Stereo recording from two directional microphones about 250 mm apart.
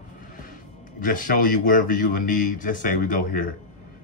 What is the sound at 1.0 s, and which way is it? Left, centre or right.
Speech, left.